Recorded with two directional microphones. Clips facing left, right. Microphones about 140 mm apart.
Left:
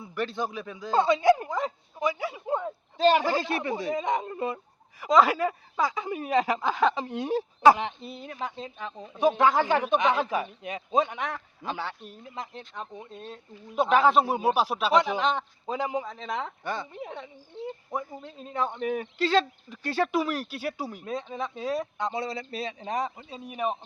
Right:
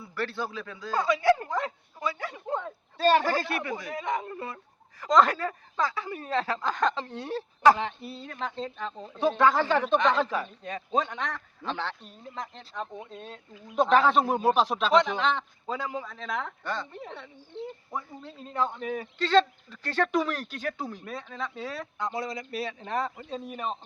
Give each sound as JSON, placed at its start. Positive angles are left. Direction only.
{"t": 0.0, "sound": "speech", "side_deg": 15}
{"t": 5.0, "sound": "speech", "side_deg": 5}
{"t": 19.2, "sound": "speech", "side_deg": 10}